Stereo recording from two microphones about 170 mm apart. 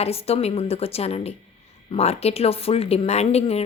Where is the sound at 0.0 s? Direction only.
35° left (ahead or behind).